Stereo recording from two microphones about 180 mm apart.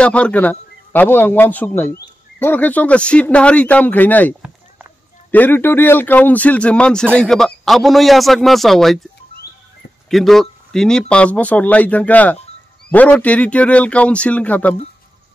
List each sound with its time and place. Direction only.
0.0 s a man's voice: 5° left (ahead or behind)
10.0 s speech: centre (ahead or behind)